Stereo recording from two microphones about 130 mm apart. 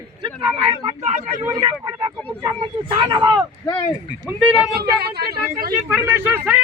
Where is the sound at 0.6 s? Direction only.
50° right (ahead or behind).